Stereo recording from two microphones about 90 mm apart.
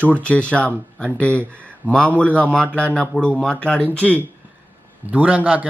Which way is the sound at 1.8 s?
10° left (ahead or behind).